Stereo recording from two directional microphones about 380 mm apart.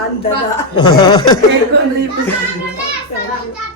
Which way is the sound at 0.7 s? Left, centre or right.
Centre.